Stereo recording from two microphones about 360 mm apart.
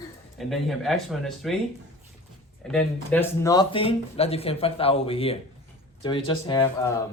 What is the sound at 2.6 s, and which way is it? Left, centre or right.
Speech, centre.